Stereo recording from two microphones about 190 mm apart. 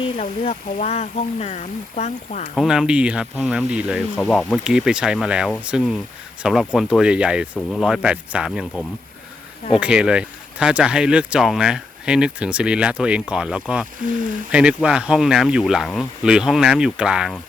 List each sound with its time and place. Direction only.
0.0 s speech: 30° left (ahead or behind)
2.6 s speech: 5° right (ahead or behind)
4.1 s speech: 5° left (ahead or behind)